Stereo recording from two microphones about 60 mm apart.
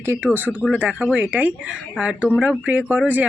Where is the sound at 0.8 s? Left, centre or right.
Centre.